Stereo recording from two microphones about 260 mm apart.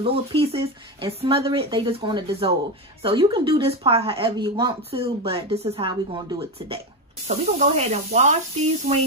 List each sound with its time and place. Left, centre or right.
0.0 s speech: right